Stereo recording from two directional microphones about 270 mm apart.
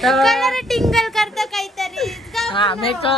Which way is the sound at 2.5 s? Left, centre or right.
Centre.